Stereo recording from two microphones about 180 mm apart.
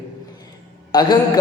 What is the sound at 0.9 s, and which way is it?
Speech, 20° left (ahead or behind).